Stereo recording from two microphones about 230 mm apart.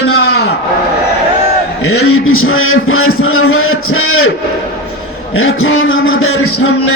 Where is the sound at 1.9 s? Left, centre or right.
Left.